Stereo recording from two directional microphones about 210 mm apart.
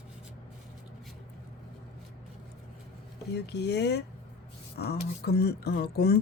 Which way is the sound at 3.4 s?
55° left (ahead or behind).